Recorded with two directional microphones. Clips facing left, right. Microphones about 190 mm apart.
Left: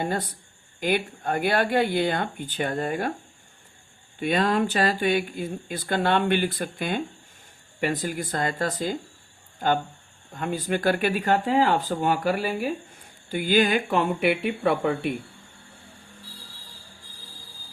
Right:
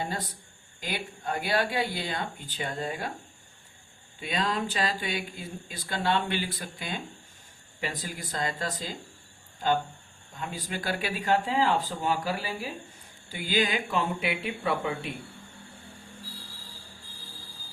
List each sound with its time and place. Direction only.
0.8 s speech: 55° left (ahead or behind)
4.2 s speech: 55° left (ahead or behind)
10.3 s speech: 60° left (ahead or behind)